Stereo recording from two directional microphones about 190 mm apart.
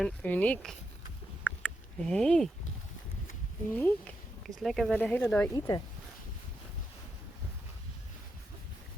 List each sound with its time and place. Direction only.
0.0 s speech: 5° left (ahead or behind)
1.5 s a sound: 5° left (ahead or behind)
3.8 s speech: 10° left (ahead or behind)
5.5 s speech: 20° left (ahead or behind)